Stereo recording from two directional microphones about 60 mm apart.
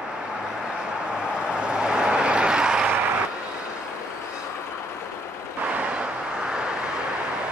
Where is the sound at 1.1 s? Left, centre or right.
Centre.